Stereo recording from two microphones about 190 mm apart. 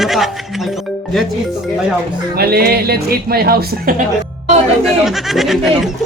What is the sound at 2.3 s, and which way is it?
Music, 55° right (ahead or behind).